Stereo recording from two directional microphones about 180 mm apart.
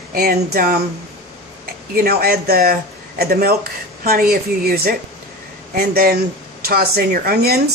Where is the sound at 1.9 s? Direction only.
55° right (ahead or behind).